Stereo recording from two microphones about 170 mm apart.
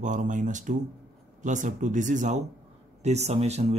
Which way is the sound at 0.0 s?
45° right (ahead or behind).